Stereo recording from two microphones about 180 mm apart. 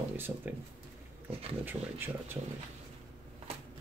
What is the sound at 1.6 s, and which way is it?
Speech, 10° right (ahead or behind).